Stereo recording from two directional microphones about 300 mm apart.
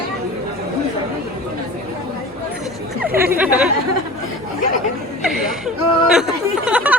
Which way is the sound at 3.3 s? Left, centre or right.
Centre.